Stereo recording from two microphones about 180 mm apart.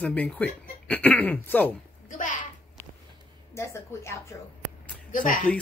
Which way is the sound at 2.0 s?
45° left (ahead or behind).